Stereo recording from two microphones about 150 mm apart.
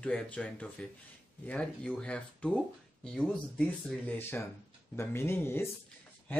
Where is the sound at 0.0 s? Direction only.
5° left (ahead or behind).